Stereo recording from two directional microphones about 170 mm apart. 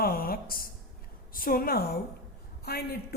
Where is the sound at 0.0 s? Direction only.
60° left (ahead or behind).